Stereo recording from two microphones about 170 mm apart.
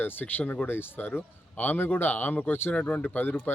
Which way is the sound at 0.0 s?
10° left (ahead or behind).